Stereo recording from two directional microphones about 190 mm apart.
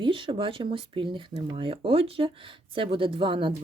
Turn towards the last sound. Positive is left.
turn(degrees=-25)  # may be behind; listen again after turning